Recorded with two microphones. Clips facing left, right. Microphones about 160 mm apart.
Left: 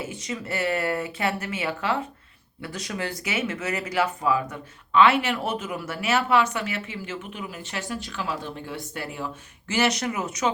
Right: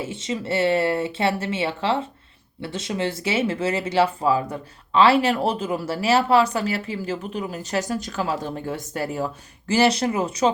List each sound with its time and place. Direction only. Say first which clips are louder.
0.0 s speech: right 4 dB; 25° right (ahead or behind)